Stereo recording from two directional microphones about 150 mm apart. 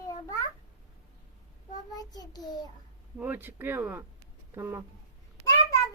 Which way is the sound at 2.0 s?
25° left (ahead or behind).